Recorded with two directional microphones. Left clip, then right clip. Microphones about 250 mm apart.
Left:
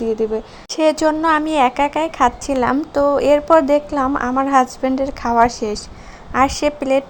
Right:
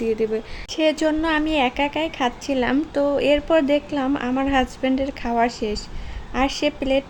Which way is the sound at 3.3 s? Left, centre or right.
Centre.